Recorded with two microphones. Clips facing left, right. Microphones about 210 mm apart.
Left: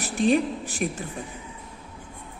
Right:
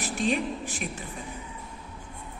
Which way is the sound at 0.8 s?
45° left (ahead or behind).